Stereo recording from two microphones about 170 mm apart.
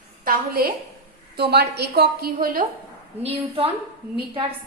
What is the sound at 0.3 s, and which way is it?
A woman's voice, 60° right (ahead or behind).